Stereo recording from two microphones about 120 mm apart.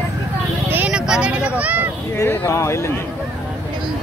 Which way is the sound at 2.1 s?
20° left (ahead or behind).